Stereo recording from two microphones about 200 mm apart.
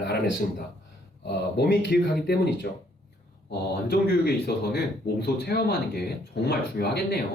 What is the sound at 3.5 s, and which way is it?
Speech, 55° left (ahead or behind).